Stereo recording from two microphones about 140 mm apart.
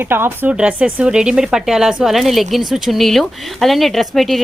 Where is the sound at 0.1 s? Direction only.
15° right (ahead or behind).